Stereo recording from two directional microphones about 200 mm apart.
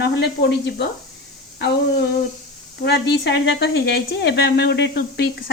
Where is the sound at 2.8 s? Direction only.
55° left (ahead or behind).